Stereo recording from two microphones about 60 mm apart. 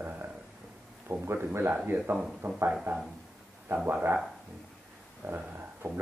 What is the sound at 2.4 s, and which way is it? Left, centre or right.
Speech, right.